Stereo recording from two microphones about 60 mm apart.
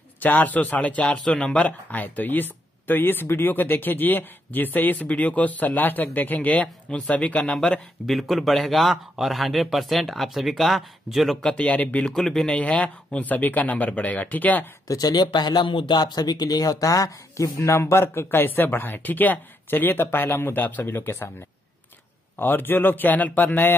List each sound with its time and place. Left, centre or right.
0.2 s speech: left
8.1 s speech: centre
11.4 s speech: left
12.0 s speech: centre
12.5 s speech: centre
14.9 s speech: left
16.2 s speech: left
20.8 s speech: left
22.4 s speech: left